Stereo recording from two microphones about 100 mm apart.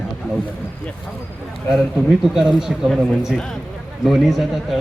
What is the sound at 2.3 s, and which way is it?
Speech, 5° right (ahead or behind).